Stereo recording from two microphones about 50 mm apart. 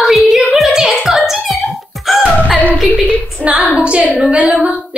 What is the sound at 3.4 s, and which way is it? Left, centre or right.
Female singing, right.